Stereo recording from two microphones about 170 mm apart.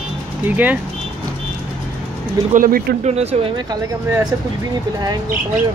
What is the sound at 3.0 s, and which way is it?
Speech, 40° right (ahead or behind).